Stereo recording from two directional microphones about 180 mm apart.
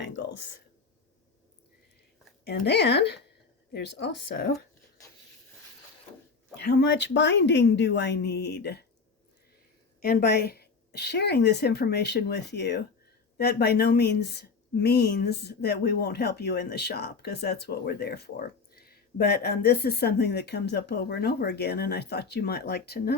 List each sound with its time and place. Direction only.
2.6 s a woman's voice: 65° left (ahead or behind)
6.6 s a woman's voice: 65° left (ahead or behind)
10.0 s speech: 55° left (ahead or behind)